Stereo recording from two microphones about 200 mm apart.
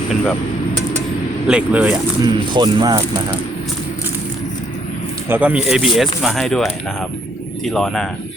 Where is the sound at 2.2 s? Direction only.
20° right (ahead or behind).